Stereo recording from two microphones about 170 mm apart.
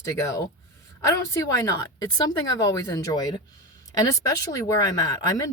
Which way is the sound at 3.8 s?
20° left (ahead or behind).